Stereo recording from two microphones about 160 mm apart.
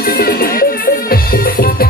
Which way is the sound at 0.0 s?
75° left (ahead or behind).